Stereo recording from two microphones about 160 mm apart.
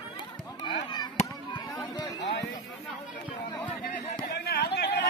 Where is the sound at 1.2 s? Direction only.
45° left (ahead or behind).